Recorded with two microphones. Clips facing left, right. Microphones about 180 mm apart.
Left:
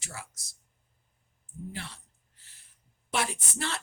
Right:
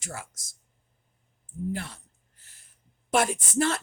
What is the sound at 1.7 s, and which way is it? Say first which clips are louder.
Speech: right 8 dB; 45° right (ahead or behind).